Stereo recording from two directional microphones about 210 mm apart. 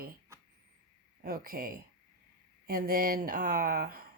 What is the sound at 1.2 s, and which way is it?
Speech, 45° right (ahead or behind).